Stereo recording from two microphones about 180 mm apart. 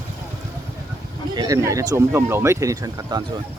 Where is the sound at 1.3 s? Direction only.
20° right (ahead or behind).